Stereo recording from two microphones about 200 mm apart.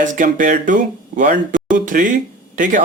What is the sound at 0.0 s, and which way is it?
Speech, 40° right (ahead or behind).